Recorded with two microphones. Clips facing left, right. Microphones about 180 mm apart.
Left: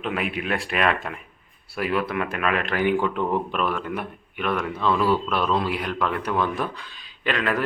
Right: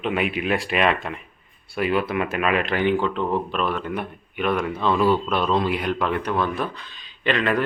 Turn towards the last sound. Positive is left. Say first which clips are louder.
# right 3 dB
turn(degrees=5)  # may be behind; listen again after turning